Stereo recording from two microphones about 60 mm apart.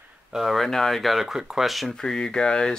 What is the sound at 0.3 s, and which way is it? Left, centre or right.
Speech, centre.